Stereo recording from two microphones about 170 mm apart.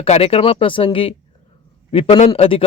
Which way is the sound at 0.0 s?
35° left (ahead or behind).